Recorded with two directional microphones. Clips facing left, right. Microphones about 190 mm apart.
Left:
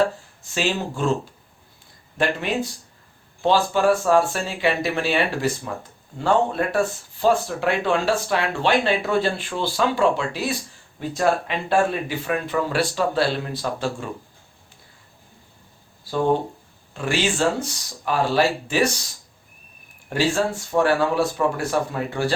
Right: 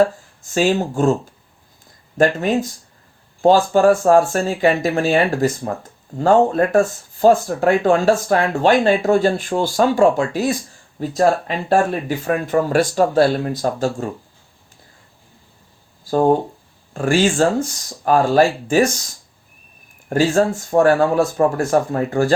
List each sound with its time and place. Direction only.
0.5 s speech: 45° right (ahead or behind)
2.1 s speech: 45° right (ahead or behind)
16.0 s speech: 45° right (ahead or behind)
20.1 s speech: 45° right (ahead or behind)